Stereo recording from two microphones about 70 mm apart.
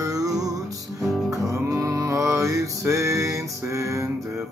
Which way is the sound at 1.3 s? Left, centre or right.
Right.